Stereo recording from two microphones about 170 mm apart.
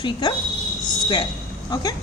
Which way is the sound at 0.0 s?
25° left (ahead or behind).